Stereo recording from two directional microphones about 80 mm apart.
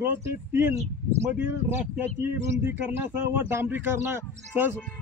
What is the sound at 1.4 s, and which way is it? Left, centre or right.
Speech, right.